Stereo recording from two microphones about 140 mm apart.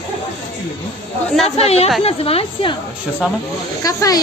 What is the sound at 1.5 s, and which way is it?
A woman's voice, 45° left (ahead or behind).